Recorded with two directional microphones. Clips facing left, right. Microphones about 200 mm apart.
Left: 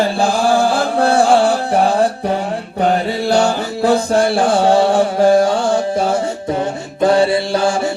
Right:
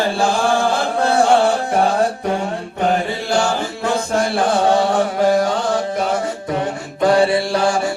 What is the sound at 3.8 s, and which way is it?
Chant, 35° left (ahead or behind).